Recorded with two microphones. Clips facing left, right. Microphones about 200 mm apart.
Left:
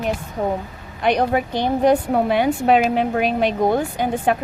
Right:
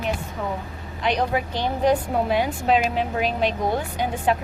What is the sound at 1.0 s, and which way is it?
A woman's voice, 55° left (ahead or behind).